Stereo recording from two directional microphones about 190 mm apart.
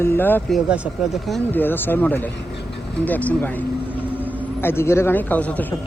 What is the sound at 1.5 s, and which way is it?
A man's voice, 10° left (ahead or behind).